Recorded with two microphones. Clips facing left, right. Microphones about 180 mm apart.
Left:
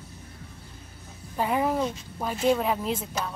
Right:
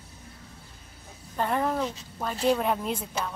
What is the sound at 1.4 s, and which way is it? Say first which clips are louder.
Speech: left 2 dB; 10° left (ahead or behind).